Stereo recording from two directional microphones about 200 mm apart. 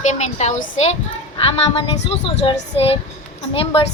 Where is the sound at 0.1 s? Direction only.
35° left (ahead or behind).